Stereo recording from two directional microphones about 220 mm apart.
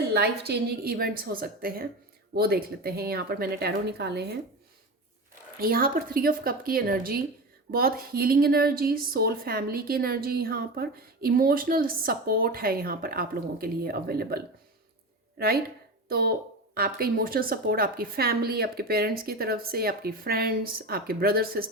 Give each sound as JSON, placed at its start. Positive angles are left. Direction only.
{"t": 0.1, "sound": "a woman's voice", "side_deg": -50}
{"t": 5.5, "sound": "a woman's voice", "side_deg": -40}